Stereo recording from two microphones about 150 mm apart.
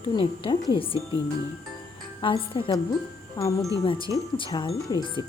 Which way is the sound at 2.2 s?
35° left (ahead or behind).